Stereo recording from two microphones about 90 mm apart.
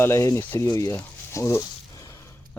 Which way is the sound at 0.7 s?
35° left (ahead or behind).